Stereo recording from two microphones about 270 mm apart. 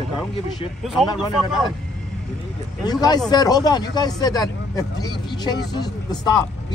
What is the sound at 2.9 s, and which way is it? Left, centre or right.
Speech, centre.